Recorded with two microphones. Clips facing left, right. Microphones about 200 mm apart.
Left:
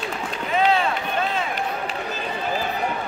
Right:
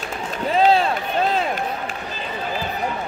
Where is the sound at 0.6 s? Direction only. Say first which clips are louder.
Right 4 dB; 35° right (ahead or behind).